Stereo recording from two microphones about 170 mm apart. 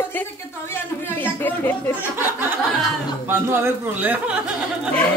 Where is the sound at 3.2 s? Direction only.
15° right (ahead or behind).